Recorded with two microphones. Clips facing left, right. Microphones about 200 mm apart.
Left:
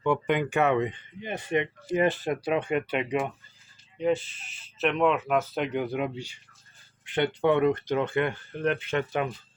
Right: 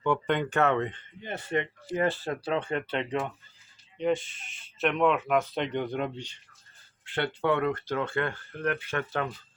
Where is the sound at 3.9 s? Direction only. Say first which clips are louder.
Left 1 dB; 5° left (ahead or behind).